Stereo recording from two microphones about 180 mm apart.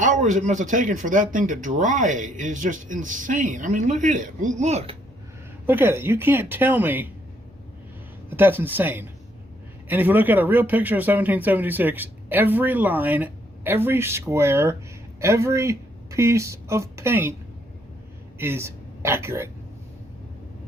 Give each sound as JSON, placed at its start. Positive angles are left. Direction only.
{"t": 0.0, "sound": "speech", "side_deg": -45}
{"t": 5.6, "sound": "speech", "side_deg": -10}
{"t": 8.3, "sound": "speech", "side_deg": -10}
{"t": 18.3, "sound": "speech", "side_deg": -15}